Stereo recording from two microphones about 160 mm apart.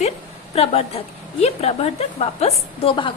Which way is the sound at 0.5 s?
40° left (ahead or behind).